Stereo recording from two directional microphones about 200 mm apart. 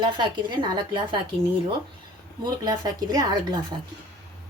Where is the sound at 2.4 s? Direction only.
20° right (ahead or behind).